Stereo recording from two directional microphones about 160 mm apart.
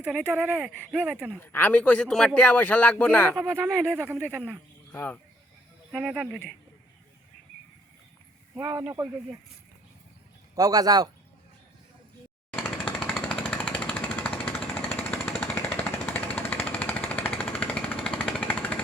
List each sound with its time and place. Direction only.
0.0 s speech: 10° right (ahead or behind)
1.4 s speech: 10° left (ahead or behind)
3.4 s speech: 15° right (ahead or behind)
3.7 s speech: 5° left (ahead or behind)
3.9 s speech: 15° right (ahead or behind)
4.9 s speech: 10° left (ahead or behind)
5.9 s speech: centre (ahead or behind)
8.5 s speech: 15° right (ahead or behind)
10.5 s a man's voice: 20° right (ahead or behind)
12.5 s jackhammer: 10° left (ahead or behind)